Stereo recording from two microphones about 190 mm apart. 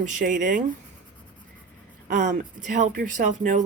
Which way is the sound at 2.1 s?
40° right (ahead or behind).